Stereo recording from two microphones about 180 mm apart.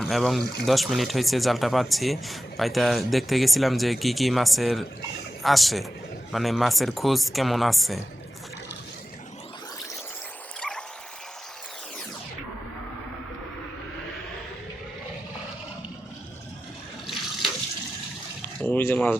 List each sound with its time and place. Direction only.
0.0 s speech: centre (ahead or behind)
10.6 s a sound: 5° left (ahead or behind)
18.6 s speech: 10° left (ahead or behind)